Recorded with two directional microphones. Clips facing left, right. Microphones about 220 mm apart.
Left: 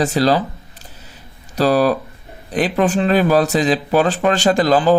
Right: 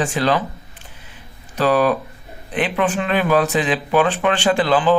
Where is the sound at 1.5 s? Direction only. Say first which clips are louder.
Left 2 dB; 40° left (ahead or behind).